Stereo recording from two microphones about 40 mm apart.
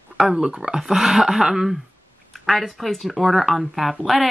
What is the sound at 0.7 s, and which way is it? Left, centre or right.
Speech, centre.